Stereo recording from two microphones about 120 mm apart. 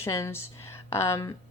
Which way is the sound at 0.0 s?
20° left (ahead or behind).